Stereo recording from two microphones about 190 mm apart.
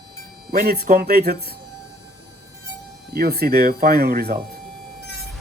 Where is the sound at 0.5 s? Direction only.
55° right (ahead or behind).